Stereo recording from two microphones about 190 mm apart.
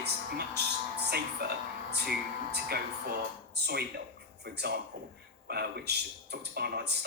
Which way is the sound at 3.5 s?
60° right (ahead or behind).